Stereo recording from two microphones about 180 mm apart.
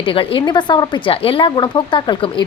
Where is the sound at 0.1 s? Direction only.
30° left (ahead or behind).